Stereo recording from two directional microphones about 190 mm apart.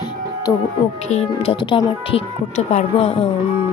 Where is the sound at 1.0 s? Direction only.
35° left (ahead or behind).